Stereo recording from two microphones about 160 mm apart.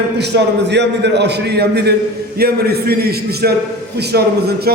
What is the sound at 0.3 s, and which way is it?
A man's voice, 90° right.